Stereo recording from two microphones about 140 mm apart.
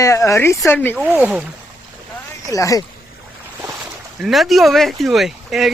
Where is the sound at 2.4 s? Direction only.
25° left (ahead or behind).